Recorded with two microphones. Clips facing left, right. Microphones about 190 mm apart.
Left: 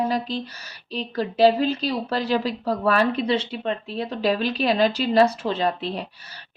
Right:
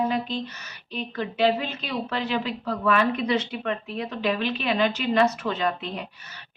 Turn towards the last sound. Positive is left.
turn(degrees=35)  # may be behind; listen again after turning